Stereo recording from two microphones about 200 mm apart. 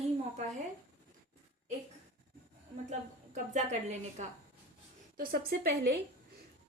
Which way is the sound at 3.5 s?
35° right (ahead or behind).